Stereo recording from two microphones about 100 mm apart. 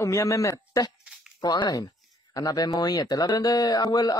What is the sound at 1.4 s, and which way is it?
Speech, 45° left (ahead or behind).